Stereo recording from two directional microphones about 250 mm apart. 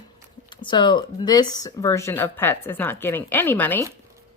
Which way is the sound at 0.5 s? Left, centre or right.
Centre.